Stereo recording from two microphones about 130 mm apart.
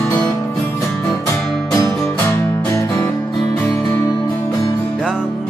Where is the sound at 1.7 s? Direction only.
25° left (ahead or behind).